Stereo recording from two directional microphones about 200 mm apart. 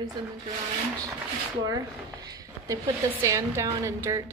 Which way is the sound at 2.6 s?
15° right (ahead or behind).